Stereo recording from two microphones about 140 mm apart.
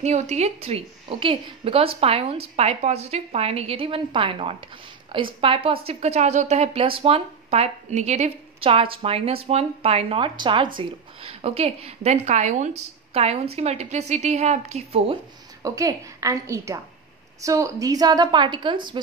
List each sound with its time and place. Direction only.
0.0 s a woman's voice: 55° right (ahead or behind)
15.6 s a woman's voice: 25° right (ahead or behind)